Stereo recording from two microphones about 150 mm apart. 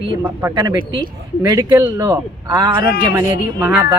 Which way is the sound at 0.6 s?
30° right (ahead or behind).